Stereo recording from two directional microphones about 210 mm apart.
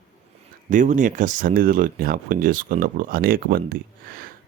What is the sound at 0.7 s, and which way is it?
Speech, 35° right (ahead or behind).